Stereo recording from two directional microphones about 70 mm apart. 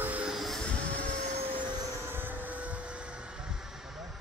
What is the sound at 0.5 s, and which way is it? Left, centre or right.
Vehicle, centre.